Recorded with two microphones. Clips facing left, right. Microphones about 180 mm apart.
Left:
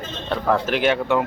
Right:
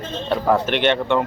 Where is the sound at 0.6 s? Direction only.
5° left (ahead or behind).